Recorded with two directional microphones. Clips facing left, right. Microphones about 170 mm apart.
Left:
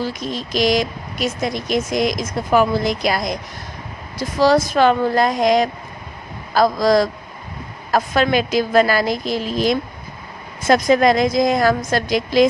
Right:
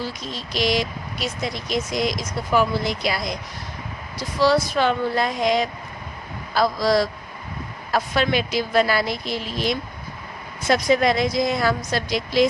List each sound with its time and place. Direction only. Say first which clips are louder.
0.5 s a woman's voice: left 4 dB; 45° left (ahead or behind)